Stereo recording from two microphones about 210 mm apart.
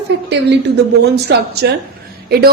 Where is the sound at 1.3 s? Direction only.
55° right (ahead or behind).